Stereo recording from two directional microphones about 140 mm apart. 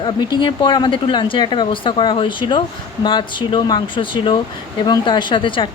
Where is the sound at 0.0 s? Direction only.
30° left (ahead or behind).